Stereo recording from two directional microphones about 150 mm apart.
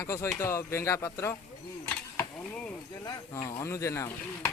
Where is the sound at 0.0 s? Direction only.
20° left (ahead or behind).